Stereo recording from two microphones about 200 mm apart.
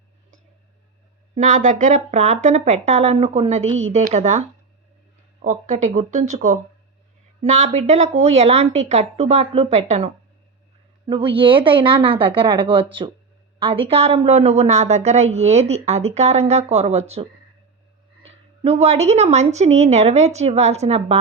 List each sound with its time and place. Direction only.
1.4 s a woman's voice: 40° right (ahead or behind)
18.3 s a woman's voice: 30° right (ahead or behind)